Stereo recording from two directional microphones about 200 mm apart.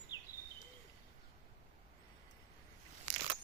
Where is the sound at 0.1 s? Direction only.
20° left (ahead or behind).